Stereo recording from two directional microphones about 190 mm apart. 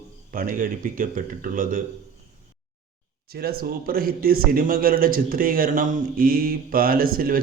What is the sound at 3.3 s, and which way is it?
Speech, 55° right (ahead or behind).